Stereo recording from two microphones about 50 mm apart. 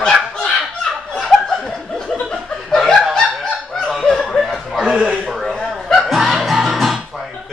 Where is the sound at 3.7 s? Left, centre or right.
Centre.